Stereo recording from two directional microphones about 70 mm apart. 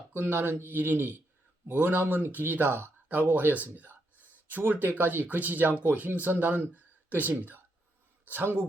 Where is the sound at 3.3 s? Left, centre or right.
Right.